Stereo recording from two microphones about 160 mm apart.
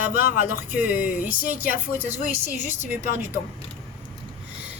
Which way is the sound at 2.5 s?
50° left (ahead or behind).